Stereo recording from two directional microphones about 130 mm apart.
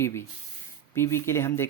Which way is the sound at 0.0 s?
20° left (ahead or behind).